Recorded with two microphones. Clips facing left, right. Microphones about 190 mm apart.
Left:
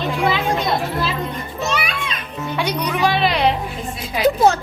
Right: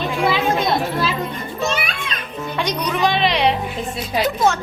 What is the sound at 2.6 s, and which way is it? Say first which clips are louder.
Speech: even; 10° left (ahead or behind).